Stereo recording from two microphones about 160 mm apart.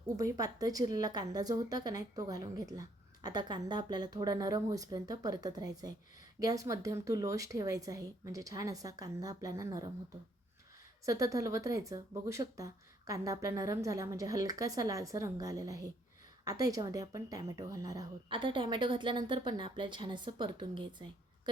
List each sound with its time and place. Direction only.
0.2 s a woman's voice: 20° right (ahead or behind)
11.0 s a woman's voice: 20° right (ahead or behind)